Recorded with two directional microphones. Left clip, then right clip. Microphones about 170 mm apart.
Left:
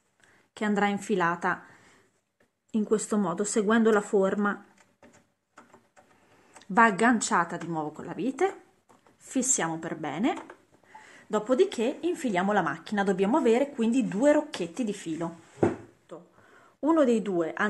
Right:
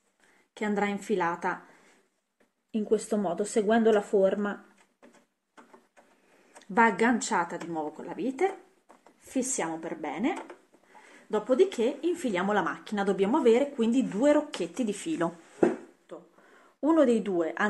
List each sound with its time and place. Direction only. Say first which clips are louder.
0.6 s speech: left 2 dB; 25° left (ahead or behind)
2.7 s speech: even; 25° left (ahead or behind)
6.6 s speech: left 2 dB; 20° left (ahead or behind)
9.3 s speech: left 2 dB; 25° left (ahead or behind); by 15.0 s 5° left (ahead or behind)
16.1 s a sound: left 1 dB; centre (ahead or behind)